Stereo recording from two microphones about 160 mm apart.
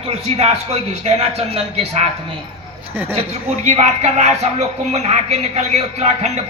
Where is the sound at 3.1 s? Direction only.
40° right (ahead or behind).